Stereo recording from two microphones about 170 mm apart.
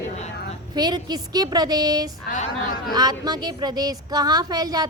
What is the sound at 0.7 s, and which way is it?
A woman's voice, 25° right (ahead or behind).